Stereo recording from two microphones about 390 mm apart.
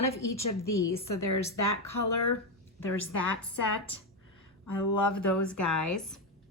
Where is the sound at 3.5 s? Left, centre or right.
Left.